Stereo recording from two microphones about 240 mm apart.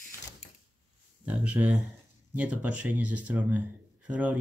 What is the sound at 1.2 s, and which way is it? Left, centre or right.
Speech, centre.